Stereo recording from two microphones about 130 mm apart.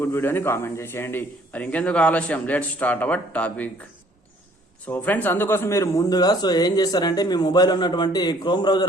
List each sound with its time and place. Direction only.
0.0 s a man's voice: 15° left (ahead or behind)
4.9 s speech: 15° left (ahead or behind); by 8.9 s 35° left (ahead or behind)